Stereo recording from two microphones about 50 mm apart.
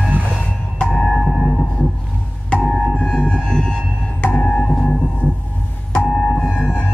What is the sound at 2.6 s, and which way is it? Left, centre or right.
Music, centre.